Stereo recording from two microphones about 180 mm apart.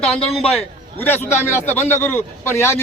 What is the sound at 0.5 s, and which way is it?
A man's voice, 10° left (ahead or behind).